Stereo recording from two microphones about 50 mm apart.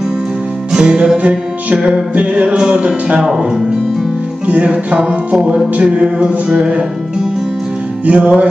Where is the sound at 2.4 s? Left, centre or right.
Centre.